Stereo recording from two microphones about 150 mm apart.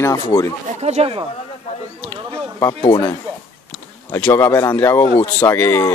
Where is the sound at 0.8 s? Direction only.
45° right (ahead or behind).